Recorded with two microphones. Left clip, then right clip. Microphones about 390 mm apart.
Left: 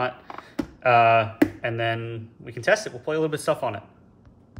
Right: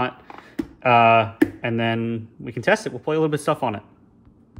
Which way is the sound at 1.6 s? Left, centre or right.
Centre.